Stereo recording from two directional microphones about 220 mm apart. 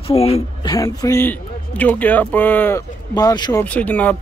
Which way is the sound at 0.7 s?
15° left (ahead or behind).